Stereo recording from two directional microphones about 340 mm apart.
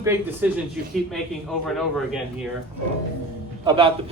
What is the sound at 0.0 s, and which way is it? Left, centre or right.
Speech, centre.